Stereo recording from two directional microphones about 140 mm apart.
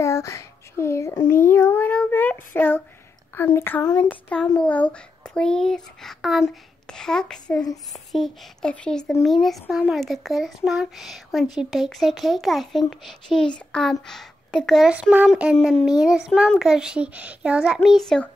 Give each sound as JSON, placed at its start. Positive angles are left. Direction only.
{"t": 0.0, "sound": "a sound", "side_deg": 20}
{"t": 1.5, "sound": "child singing", "side_deg": 15}
{"t": 3.3, "sound": "a child's voice", "side_deg": 15}
{"t": 14.9, "sound": "a child's voice", "side_deg": -10}